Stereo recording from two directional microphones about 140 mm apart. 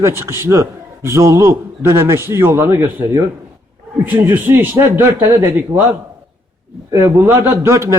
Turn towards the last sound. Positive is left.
turn(degrees=-20)  # may be behind; listen again after turning